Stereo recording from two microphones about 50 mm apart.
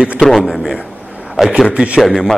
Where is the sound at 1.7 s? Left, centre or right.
Right.